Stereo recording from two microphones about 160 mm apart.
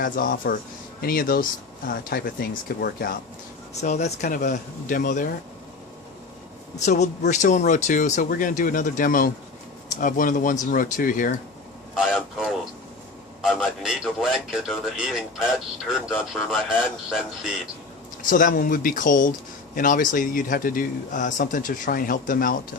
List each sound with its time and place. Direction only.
0.0 s a man's voice: 60° left (ahead or behind)
3.8 s speech: 45° left (ahead or behind)
6.8 s a man's voice: 45° left (ahead or behind)
11.9 s a man's voice: centre (ahead or behind)
18.2 s a man's voice: 55° left (ahead or behind)